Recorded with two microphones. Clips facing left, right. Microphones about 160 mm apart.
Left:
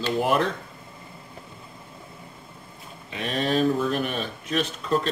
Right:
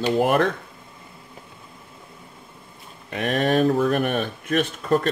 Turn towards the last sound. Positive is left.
turn(degrees=-55)  # may be behind; listen again after turning